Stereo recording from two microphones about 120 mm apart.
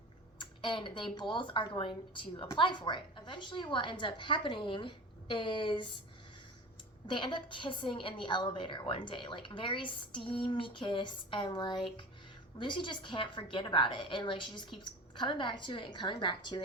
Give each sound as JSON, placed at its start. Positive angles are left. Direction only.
{"t": 0.3, "sound": "a woman's voice", "side_deg": 45}
{"t": 7.1, "sound": "a woman's voice", "side_deg": 40}